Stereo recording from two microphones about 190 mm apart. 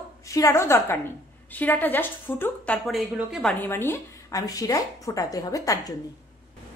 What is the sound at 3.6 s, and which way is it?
A woman's voice, 10° left (ahead or behind).